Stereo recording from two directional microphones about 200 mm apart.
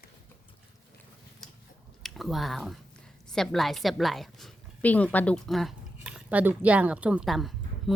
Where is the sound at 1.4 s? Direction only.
Centre (ahead or behind).